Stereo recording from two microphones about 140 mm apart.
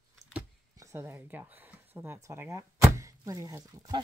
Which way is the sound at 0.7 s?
15° right (ahead or behind).